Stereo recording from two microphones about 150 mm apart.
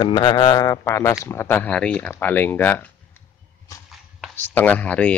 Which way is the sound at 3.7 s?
20° left (ahead or behind).